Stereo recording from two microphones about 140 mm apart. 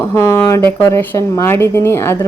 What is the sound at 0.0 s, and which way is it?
Speech, 20° left (ahead or behind).